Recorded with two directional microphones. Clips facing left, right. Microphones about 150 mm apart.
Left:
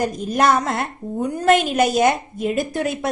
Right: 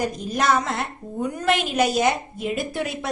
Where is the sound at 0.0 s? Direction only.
50° left (ahead or behind).